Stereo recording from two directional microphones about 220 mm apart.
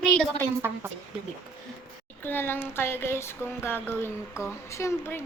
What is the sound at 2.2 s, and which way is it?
A child's voice, 10° left (ahead or behind).